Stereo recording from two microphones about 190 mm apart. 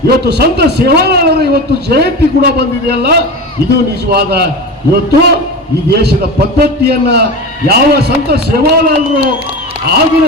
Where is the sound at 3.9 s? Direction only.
55° right (ahead or behind).